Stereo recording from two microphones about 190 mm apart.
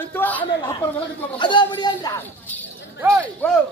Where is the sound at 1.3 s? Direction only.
25° left (ahead or behind).